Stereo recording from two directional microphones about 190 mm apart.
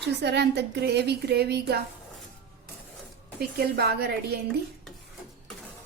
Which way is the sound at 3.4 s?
55° right (ahead or behind).